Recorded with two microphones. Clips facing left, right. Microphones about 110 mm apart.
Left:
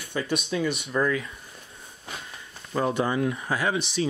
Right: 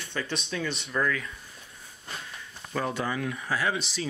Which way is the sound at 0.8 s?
25° left (ahead or behind).